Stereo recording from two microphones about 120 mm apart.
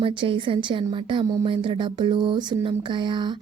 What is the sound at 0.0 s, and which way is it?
Speech, 45° right (ahead or behind).